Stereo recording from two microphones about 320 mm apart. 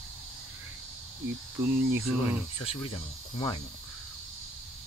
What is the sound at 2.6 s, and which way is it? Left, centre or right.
Cricket, centre.